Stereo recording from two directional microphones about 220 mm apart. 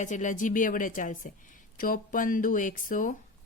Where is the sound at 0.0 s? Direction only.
35° left (ahead or behind).